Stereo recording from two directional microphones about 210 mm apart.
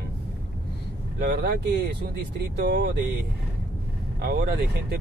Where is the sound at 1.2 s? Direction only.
50° right (ahead or behind).